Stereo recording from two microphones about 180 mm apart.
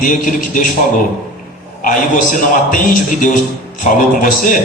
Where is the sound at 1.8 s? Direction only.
50° left (ahead or behind).